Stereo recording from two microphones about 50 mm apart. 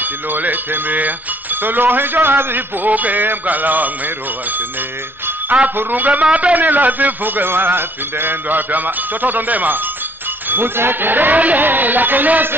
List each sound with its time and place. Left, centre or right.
0.0 s speech: right
5.8 s speech: right